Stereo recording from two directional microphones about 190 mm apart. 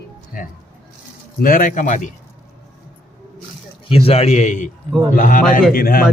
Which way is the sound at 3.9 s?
30° left (ahead or behind).